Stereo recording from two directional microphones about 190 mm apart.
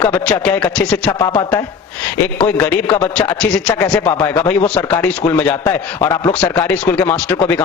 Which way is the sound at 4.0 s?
30° left (ahead or behind).